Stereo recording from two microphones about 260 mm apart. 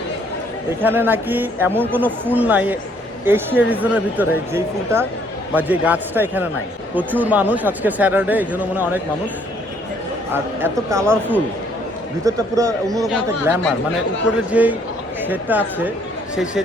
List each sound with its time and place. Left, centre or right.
0.8 s speech: centre
10.3 s a man's voice: centre